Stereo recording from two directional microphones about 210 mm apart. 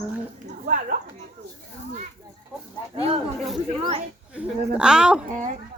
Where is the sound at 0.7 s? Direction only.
40° right (ahead or behind).